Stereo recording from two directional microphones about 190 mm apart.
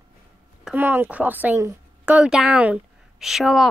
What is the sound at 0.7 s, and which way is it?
Speech, 10° right (ahead or behind).